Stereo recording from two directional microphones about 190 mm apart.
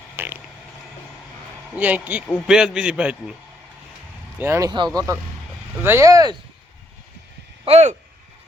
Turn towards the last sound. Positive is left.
turn(degrees=-35)  # may be behind; listen again after turning